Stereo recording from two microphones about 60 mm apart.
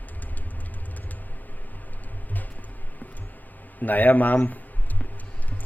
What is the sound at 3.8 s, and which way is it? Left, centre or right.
Speech, left.